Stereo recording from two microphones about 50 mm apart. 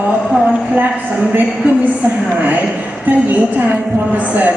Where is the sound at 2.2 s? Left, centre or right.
Right.